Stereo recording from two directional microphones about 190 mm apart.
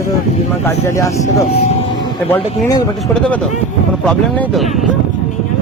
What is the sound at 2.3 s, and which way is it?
Speech, 15° left (ahead or behind).